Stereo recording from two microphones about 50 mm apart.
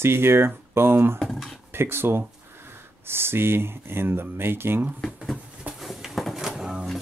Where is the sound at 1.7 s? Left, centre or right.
Right.